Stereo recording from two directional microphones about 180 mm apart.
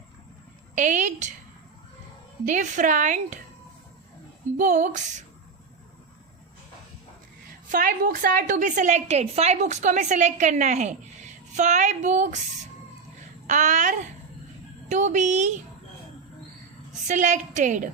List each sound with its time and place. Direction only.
0.8 s a woman's voice: 45° right (ahead or behind)
2.5 s a woman's voice: 45° right (ahead or behind)
4.5 s a woman's voice: 45° right (ahead or behind)
7.7 s a woman's voice: 50° right (ahead or behind)
13.5 s a woman's voice: 40° right (ahead or behind)
17.1 s a woman's voice: 40° right (ahead or behind)